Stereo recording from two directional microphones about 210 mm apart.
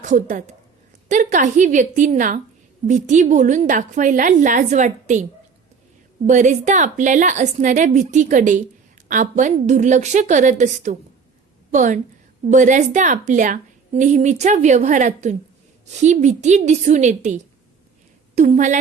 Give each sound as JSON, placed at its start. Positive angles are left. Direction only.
{"t": 0.0, "sound": "a woman's voice", "side_deg": -35}
{"t": 6.2, "sound": "a woman's voice", "side_deg": -35}